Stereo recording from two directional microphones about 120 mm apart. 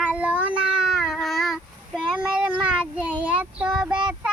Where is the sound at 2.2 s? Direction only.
10° right (ahead or behind).